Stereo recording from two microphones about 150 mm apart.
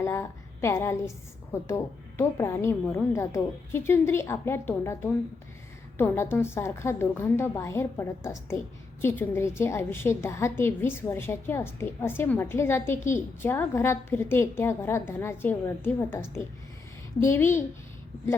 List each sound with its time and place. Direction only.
0.0 s a woman's voice: 20° left (ahead or behind)